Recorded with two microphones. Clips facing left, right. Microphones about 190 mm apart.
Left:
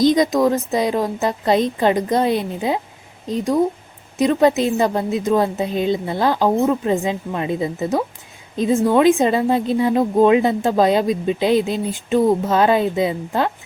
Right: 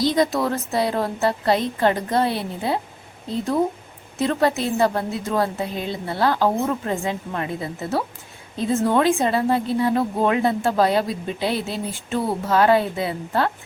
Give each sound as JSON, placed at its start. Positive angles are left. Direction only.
{"t": 0.0, "sound": "a woman's voice", "side_deg": 15}